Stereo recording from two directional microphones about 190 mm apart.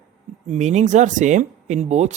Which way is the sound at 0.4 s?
40° right (ahead or behind).